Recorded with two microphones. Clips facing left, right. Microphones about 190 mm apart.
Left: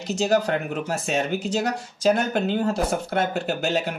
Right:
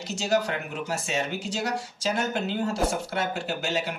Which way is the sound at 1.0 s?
55° left (ahead or behind).